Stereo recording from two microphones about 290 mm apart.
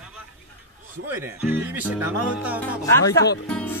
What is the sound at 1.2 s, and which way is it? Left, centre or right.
Speech, centre.